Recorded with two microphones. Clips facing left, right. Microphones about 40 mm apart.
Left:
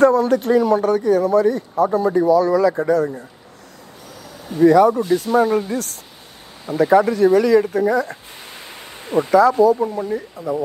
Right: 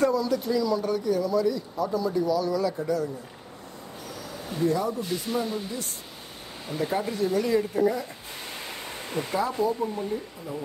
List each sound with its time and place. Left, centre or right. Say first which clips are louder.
0.0 s speech: left 10 dB; left
4.6 s speech: left 14 dB; left
9.3 s speech: left 14 dB; left